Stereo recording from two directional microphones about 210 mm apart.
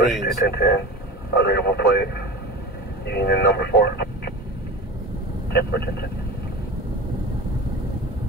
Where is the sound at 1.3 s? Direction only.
50° left (ahead or behind).